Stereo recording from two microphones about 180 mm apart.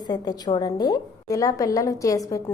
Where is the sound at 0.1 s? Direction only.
25° left (ahead or behind).